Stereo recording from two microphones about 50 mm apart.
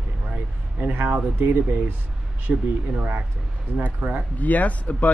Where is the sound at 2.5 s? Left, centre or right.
Centre.